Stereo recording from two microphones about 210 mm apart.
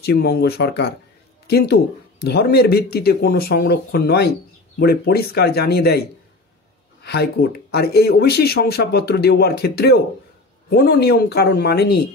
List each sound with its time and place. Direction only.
0.0 s speech: 50° left (ahead or behind)
7.0 s a sound: 50° left (ahead or behind)
7.7 s speech: 50° left (ahead or behind)